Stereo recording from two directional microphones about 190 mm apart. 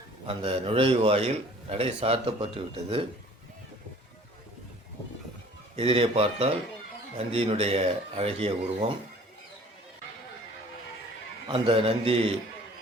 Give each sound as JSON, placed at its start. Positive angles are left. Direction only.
{"t": 0.3, "sound": "a man's voice", "side_deg": -30}
{"t": 5.7, "sound": "a man's voice", "side_deg": -30}
{"t": 11.4, "sound": "a man's voice", "side_deg": -25}